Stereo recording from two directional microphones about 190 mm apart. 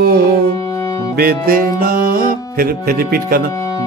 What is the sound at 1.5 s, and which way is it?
Music, 50° right (ahead or behind).